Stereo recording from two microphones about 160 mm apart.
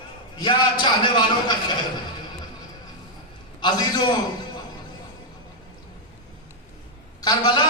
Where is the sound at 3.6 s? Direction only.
25° left (ahead or behind).